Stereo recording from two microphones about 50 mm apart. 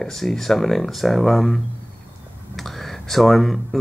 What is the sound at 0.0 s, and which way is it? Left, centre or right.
Speech, centre.